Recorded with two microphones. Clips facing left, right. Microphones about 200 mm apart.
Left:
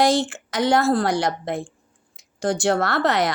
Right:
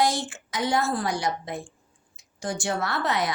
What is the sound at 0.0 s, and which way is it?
A woman's voice, 90° left.